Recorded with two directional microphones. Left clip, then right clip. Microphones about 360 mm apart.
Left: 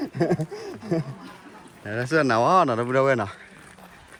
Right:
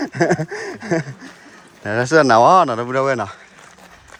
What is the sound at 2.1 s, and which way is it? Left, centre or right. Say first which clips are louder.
Speech: right 8 dB; centre.